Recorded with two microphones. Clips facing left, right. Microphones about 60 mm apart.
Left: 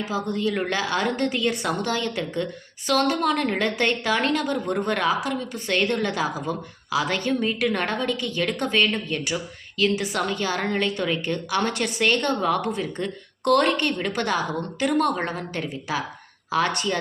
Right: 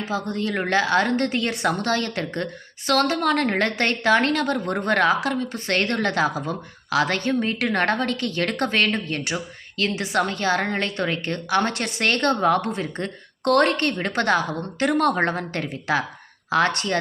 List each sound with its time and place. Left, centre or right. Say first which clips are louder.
0.1 s a woman's voice: even; right
9.3 s a woman's voice: even; right